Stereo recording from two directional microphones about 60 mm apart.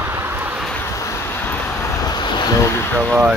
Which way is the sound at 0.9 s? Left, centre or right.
Left.